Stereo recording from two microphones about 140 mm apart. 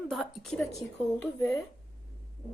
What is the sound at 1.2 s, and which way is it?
Speech, 15° left (ahead or behind).